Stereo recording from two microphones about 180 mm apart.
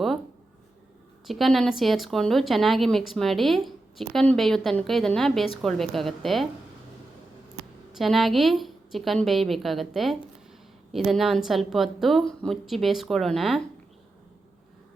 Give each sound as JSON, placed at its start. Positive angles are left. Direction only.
{"t": 1.3, "sound": "a woman's voice", "side_deg": 0}
{"t": 7.9, "sound": "a woman's voice", "side_deg": 0}